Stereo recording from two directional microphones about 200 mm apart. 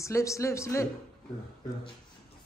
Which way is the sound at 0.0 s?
15° left (ahead or behind).